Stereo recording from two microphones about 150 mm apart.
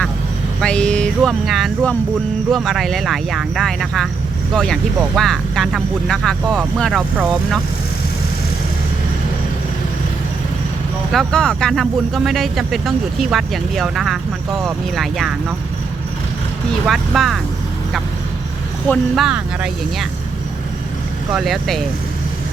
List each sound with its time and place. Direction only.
0.6 s speech: 5° left (ahead or behind)
11.1 s speech: 5° left (ahead or behind)
16.8 s speech: centre (ahead or behind)
19.1 s speech: 5° right (ahead or behind)
21.3 s speech: centre (ahead or behind)